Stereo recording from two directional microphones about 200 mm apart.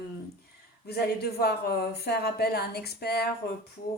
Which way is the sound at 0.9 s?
55° left (ahead or behind).